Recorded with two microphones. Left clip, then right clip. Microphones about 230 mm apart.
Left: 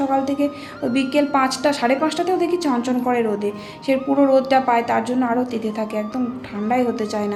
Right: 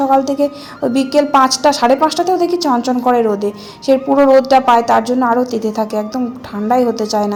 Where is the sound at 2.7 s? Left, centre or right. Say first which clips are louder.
Right 7 dB; centre.